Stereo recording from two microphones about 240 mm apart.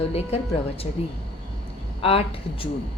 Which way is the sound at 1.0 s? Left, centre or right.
Left.